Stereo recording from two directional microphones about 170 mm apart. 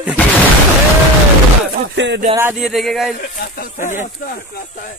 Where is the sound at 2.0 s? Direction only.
90° right.